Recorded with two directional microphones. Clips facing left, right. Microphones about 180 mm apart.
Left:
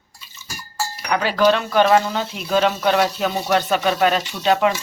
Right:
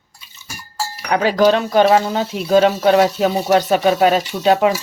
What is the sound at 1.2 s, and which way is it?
Speech, 40° right (ahead or behind).